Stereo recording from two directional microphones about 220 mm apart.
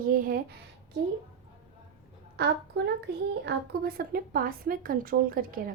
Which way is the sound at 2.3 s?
50° right (ahead or behind).